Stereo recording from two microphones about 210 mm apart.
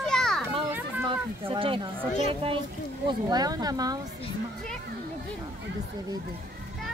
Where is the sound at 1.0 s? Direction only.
25° right (ahead or behind).